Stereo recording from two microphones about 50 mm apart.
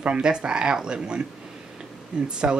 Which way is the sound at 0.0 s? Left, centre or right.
Right.